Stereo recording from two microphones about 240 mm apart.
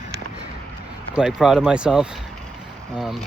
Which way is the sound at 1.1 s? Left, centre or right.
Centre.